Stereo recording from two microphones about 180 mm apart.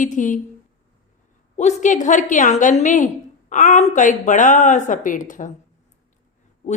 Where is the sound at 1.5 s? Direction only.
40° left (ahead or behind).